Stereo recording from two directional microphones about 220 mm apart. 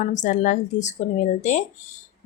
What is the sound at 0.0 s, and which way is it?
Speech, 35° left (ahead or behind).